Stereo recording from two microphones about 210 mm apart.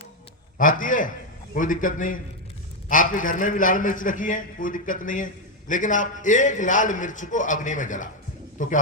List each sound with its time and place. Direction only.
0.6 s a man's voice: 40° left (ahead or behind)